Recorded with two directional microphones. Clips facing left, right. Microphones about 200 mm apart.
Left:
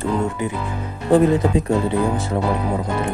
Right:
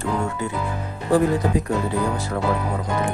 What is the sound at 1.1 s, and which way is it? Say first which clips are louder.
Speech: left 4 dB; 25° left (ahead or behind).